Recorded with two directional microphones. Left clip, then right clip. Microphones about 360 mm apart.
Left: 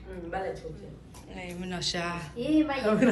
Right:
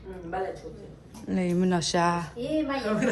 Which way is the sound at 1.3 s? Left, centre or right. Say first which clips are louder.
Right 11 dB; right.